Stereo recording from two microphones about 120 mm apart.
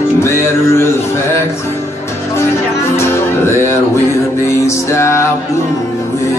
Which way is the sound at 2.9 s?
20° left (ahead or behind).